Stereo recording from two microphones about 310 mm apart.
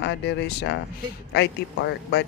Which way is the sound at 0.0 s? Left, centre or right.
Left.